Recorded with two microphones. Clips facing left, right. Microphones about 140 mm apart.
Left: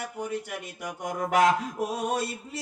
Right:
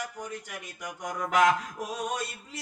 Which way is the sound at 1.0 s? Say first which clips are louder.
Left 2 dB; 50° left (ahead or behind).